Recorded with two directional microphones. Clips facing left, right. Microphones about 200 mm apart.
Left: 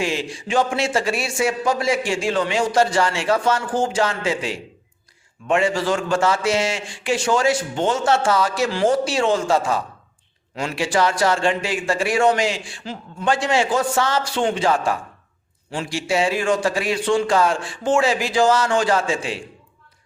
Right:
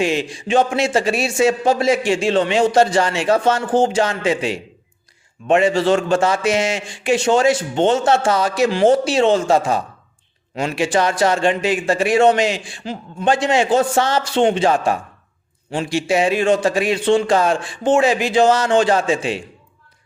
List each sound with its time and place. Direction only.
0.0 s a man's voice: 20° right (ahead or behind)